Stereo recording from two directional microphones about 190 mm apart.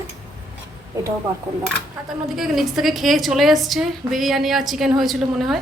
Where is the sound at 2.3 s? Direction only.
Centre (ahead or behind).